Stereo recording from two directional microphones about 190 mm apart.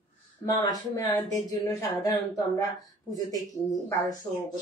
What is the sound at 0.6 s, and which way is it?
Speech, 20° left (ahead or behind).